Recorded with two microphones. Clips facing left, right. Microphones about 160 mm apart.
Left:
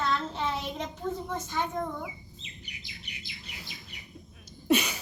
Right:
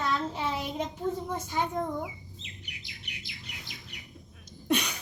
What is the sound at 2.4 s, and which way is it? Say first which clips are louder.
Chirp: even; 70° right (ahead or behind).